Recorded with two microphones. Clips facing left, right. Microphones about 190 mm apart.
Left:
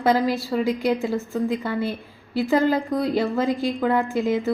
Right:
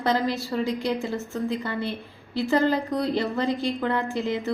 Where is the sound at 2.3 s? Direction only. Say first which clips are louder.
Left 2 dB; 15° left (ahead or behind).